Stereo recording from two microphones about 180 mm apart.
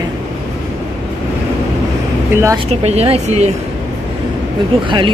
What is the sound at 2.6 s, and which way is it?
Speech, 35° right (ahead or behind).